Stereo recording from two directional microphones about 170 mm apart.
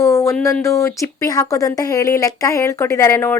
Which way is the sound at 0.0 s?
15° left (ahead or behind).